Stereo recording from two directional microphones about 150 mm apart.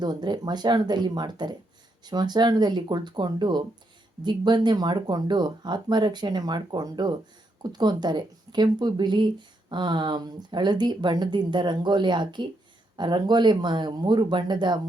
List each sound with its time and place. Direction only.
0.0 s a woman's voice: 30° right (ahead or behind)